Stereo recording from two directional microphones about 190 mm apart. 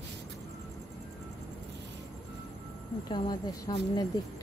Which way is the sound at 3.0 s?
25° left (ahead or behind).